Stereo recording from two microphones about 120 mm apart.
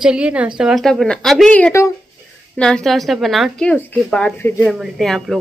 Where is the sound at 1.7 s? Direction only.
25° left (ahead or behind).